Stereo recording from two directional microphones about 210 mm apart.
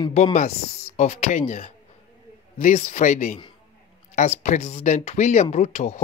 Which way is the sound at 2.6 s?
35° left (ahead or behind).